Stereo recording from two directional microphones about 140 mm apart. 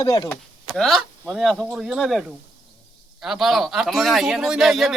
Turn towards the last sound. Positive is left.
turn(degrees=0)  # may be behind; listen again after turning